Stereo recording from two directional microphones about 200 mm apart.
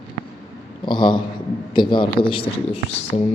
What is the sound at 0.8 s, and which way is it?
A man's voice, 25° left (ahead or behind).